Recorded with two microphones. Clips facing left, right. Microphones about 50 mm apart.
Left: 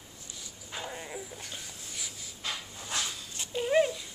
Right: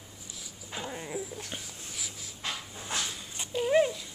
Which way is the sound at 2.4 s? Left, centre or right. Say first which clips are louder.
Right 1 dB; right.